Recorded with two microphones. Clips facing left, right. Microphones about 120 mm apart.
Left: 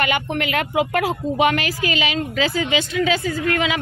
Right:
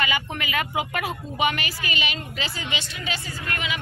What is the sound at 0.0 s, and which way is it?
Speech, 65° left (ahead or behind).